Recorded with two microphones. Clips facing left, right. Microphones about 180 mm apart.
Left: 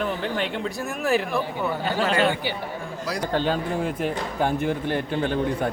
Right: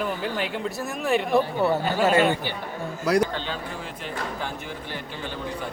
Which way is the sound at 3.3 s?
45° left (ahead or behind).